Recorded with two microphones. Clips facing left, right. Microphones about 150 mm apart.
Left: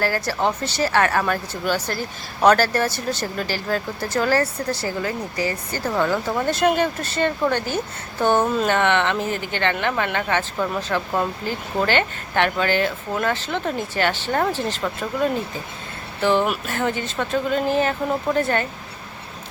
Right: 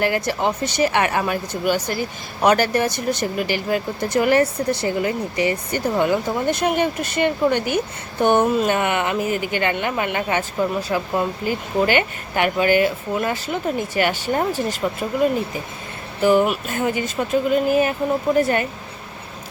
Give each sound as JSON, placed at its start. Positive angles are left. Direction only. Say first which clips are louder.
{"t": 0.0, "sound": "speech", "louder": "right 2 dB", "side_deg": -20}
{"t": 16.2, "sound": "speech", "louder": "right 3 dB", "side_deg": -10}